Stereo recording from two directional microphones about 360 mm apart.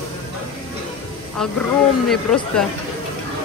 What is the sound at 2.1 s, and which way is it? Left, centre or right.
Speech, centre.